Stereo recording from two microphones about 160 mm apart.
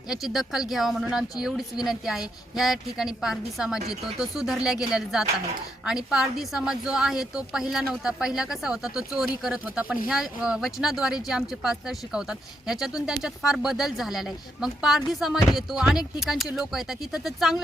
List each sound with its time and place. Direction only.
0.1 s speech: centre (ahead or behind)